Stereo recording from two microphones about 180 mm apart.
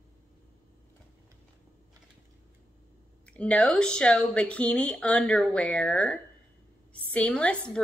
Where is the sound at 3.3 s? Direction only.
5° left (ahead or behind).